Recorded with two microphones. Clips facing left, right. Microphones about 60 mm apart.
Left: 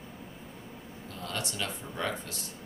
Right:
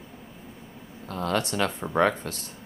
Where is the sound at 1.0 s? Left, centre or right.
Right.